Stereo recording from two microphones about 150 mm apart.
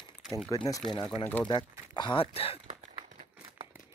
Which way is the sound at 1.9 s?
30° left (ahead or behind).